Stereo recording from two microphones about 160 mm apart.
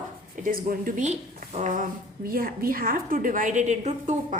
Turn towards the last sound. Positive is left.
turn(degrees=-45)  # may be behind; listen again after turning